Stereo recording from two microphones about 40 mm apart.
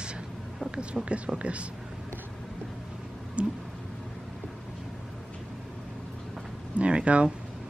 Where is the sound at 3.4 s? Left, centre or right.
Right.